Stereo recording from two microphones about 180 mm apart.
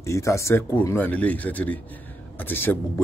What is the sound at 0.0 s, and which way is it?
Speech, 15° left (ahead or behind).